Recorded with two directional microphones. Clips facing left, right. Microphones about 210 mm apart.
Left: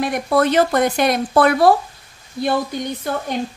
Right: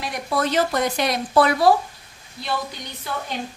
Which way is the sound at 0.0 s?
55° left (ahead or behind).